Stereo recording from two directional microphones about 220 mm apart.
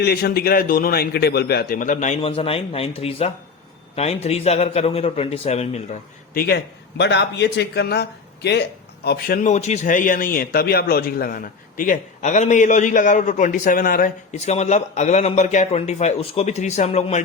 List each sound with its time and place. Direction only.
0.0 s a man's voice: 45° left (ahead or behind)
9.0 s a man's voice: 40° left (ahead or behind)